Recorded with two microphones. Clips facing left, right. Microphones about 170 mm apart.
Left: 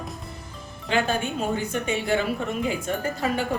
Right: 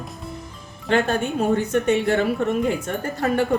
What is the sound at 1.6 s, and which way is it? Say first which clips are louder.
A woman's voice: right 7 dB; 60° right (ahead or behind).